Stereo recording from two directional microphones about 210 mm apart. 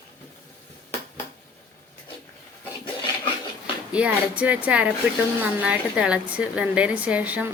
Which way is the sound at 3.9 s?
5° right (ahead or behind).